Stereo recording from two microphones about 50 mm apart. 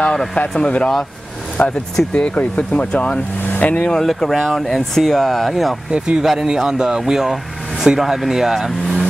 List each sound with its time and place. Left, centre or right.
0.0 s speech: centre
1.6 s speech: left
4.1 s speech: centre
5.9 s speech: centre